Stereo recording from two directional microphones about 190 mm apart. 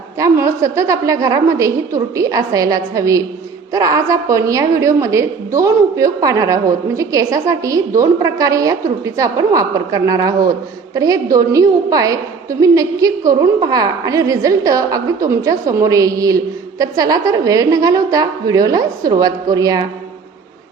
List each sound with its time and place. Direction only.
0.2 s a woman's voice: 15° right (ahead or behind)